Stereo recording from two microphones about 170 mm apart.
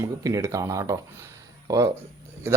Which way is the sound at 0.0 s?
20° right (ahead or behind).